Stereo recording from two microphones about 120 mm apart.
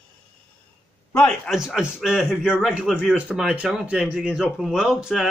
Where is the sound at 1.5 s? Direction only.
5° right (ahead or behind).